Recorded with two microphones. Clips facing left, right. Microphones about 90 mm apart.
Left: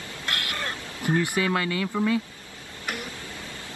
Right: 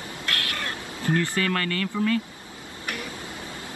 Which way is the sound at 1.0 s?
15° left (ahead or behind).